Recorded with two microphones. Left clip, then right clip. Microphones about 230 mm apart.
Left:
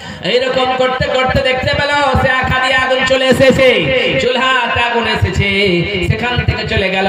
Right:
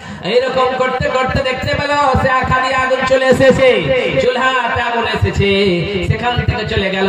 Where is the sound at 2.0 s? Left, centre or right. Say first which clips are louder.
Even; left.